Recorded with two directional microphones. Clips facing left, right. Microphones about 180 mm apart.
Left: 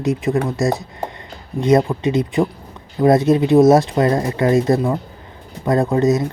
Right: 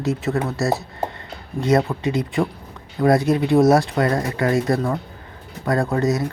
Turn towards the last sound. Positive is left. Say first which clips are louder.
# left 4 dB
turn(degrees=20)  # may be behind; listen again after turning